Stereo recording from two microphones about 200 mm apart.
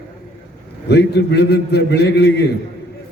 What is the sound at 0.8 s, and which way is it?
A man's voice, 55° left (ahead or behind).